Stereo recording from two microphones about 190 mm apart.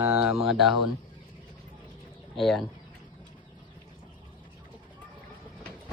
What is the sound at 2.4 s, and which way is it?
Speech, centre (ahead or behind).